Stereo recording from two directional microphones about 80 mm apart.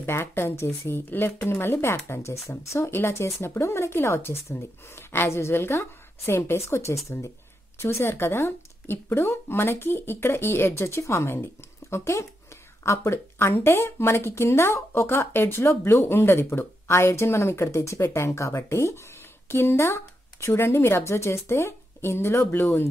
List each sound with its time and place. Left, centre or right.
0.0 s speech: left